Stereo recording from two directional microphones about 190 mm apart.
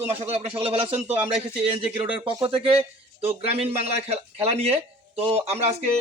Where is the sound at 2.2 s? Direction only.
30° right (ahead or behind).